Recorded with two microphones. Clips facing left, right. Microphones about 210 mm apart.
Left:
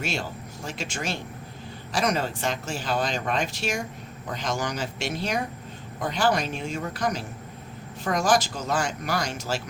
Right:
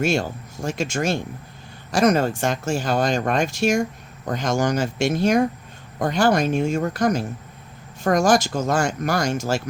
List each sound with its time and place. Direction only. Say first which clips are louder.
0.0 s speech: right 9 dB; 45° right (ahead or behind)